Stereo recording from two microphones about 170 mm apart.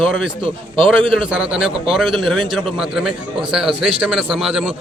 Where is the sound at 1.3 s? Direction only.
5° right (ahead or behind).